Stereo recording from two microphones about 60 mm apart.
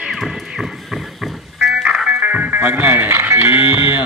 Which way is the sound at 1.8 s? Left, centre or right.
Centre.